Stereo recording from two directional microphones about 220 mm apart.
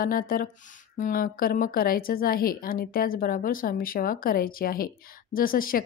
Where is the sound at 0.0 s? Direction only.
40° left (ahead or behind).